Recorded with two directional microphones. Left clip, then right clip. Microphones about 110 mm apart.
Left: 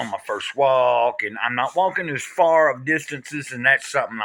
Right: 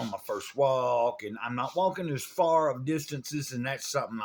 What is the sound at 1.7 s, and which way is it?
Speech, 25° left (ahead or behind).